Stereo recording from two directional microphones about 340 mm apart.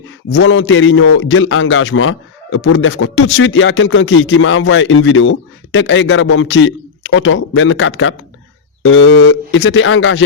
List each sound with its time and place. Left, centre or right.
0.3 s a man's voice: left